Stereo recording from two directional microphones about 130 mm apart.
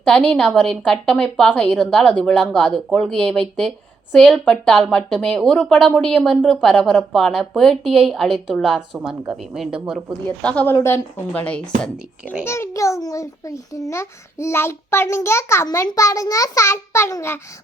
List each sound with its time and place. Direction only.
0.0 s a woman's voice: 5° left (ahead or behind)
10.2 s a child's voice: 10° left (ahead or behind)
12.5 s a child's voice: 20° left (ahead or behind)